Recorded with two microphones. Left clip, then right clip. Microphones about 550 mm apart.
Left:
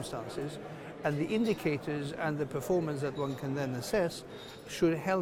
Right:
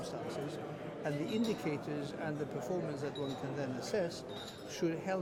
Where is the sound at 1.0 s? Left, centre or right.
Left.